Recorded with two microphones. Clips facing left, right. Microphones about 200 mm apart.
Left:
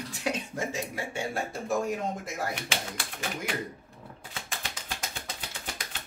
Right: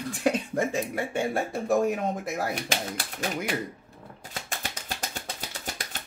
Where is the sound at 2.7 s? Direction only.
40° right (ahead or behind).